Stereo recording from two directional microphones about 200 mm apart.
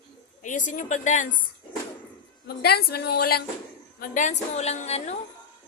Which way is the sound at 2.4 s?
50° left (ahead or behind).